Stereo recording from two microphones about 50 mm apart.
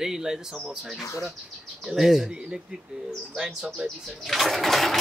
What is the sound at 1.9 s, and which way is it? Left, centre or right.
Speech, centre.